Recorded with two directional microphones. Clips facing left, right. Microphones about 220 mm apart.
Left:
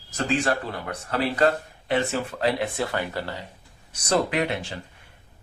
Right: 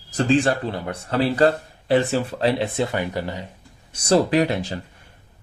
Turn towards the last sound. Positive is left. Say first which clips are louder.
# right 6 dB
turn(degrees=-35)  # may be behind; listen again after turning